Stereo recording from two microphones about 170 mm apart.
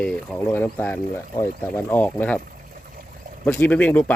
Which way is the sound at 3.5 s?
10° left (ahead or behind).